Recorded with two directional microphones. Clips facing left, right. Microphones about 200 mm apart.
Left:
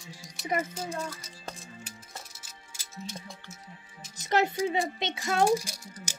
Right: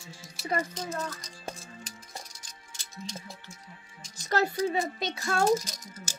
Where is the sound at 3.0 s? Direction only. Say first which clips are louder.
Even; 5° left (ahead or behind).